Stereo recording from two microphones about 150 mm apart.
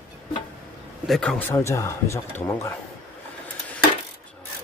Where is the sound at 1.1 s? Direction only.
5° left (ahead or behind).